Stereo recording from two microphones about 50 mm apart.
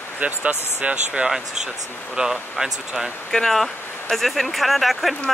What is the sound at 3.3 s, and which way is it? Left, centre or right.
Speech, centre.